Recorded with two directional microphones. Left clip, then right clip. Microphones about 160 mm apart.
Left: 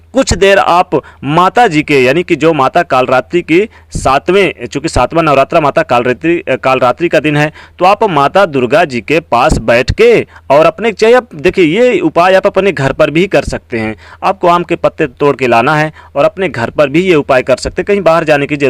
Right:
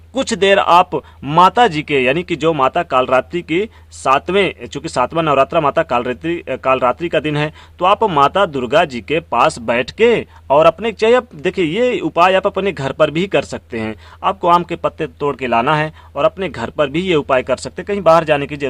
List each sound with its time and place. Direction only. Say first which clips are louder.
0.1 s speech: left 6 dB; 30° left (ahead or behind)